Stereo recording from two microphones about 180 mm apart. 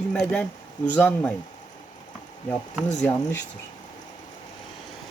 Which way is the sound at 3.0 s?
10° left (ahead or behind).